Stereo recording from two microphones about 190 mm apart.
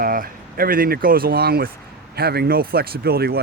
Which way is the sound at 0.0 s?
50° right (ahead or behind).